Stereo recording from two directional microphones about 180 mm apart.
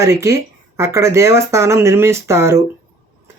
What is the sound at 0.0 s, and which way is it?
Speech, 15° right (ahead or behind).